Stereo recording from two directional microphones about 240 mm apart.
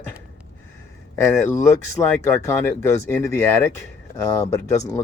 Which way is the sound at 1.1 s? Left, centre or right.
Centre.